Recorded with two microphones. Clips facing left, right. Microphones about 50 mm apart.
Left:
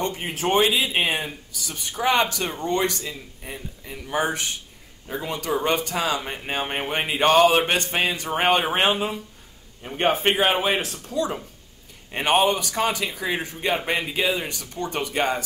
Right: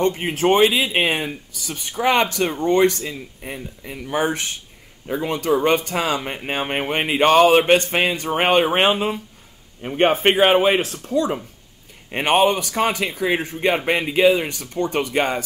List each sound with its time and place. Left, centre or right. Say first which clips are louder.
0.6 s a man's voice: right 4 dB; right